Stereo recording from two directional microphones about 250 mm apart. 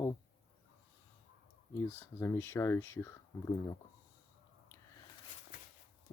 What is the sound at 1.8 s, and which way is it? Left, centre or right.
Speech, centre.